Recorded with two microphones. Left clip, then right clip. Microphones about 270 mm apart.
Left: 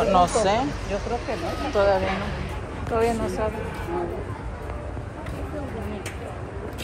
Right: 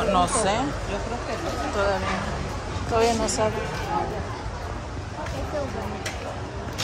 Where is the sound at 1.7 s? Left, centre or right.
Centre.